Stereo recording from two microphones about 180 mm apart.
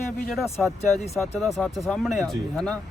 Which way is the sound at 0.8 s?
35° left (ahead or behind).